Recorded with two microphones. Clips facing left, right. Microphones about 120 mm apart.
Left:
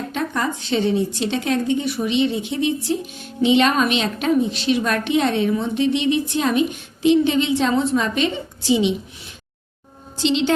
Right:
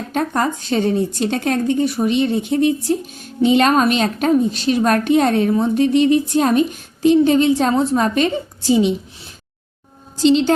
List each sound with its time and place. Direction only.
0.1 s a woman's voice: 45° right (ahead or behind)